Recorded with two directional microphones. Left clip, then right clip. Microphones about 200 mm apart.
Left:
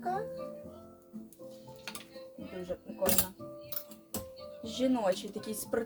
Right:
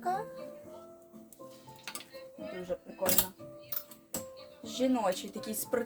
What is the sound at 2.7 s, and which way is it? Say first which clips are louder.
Speech: right 3 dB; 15° right (ahead or behind).